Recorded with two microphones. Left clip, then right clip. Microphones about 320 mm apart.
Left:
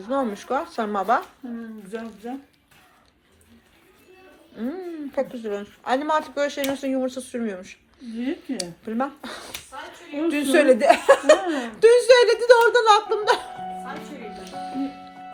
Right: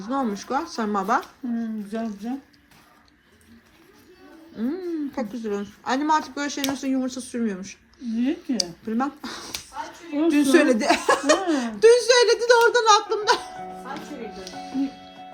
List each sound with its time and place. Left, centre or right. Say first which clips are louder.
0.2 s a woman's voice: right 1 dB; centre
4.7 s a woman's voice: right 1 dB; centre